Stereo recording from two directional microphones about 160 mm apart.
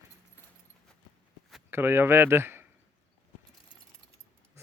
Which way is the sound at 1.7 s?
15° right (ahead or behind).